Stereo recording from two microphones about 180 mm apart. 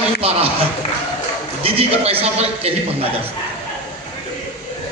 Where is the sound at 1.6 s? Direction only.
35° right (ahead or behind).